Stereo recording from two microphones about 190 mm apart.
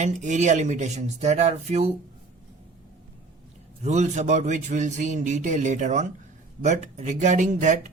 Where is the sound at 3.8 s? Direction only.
40° right (ahead or behind).